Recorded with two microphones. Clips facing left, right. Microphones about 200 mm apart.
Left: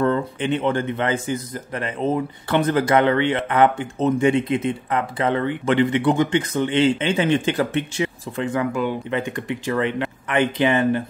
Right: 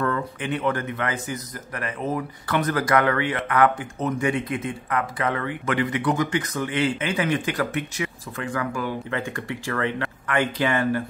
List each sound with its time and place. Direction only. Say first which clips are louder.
0.0 s a man's voice: left 5 dB; 25° left (ahead or behind)